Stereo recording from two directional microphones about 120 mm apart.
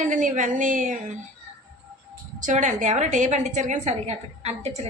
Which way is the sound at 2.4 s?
90° right.